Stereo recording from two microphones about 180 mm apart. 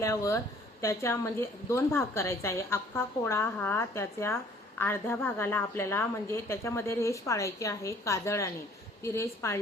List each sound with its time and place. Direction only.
0.0 s a woman's voice: 15° left (ahead or behind)